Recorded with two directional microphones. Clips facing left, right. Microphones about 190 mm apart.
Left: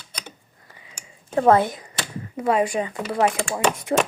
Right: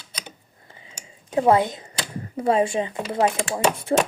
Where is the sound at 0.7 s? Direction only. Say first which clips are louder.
Right 1 dB; 30° right (ahead or behind).